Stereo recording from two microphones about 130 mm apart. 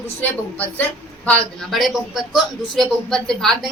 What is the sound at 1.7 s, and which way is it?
A man's voice, centre (ahead or behind).